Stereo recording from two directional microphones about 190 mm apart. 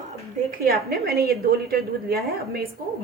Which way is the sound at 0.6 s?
55° right (ahead or behind).